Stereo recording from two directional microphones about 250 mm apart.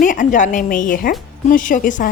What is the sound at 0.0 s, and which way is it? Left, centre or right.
A woman's voice, left.